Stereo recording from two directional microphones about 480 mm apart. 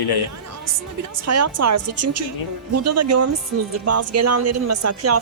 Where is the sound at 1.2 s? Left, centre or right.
Right.